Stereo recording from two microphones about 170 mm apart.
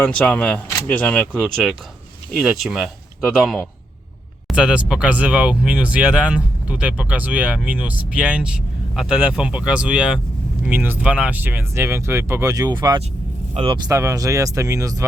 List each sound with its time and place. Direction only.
0.0 s speech: 5° left (ahead or behind); by 15.0 s 20° right (ahead or behind)